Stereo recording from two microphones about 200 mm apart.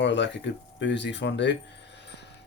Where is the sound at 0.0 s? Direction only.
60° left (ahead or behind).